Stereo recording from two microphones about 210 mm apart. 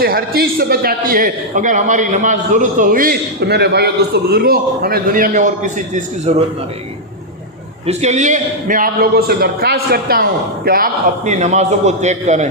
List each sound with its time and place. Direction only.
0.0 s a man's voice: 45° right (ahead or behind)
7.9 s a man's voice: 35° right (ahead or behind)